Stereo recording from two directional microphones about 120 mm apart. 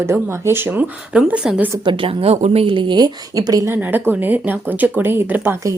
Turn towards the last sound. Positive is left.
turn(degrees=-20)  # may be behind; listen again after turning